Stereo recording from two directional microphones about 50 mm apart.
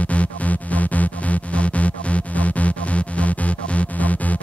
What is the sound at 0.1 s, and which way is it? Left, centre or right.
Music, left.